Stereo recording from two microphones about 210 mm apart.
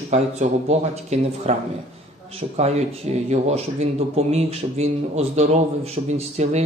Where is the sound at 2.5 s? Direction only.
30° right (ahead or behind).